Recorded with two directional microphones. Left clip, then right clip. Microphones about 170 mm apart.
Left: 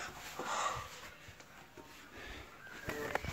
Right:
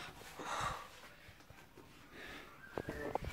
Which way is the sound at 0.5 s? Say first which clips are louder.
Left 3 dB; 15° right (ahead or behind).